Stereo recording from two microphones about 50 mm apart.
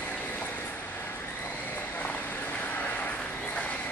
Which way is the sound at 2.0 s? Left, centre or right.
Left.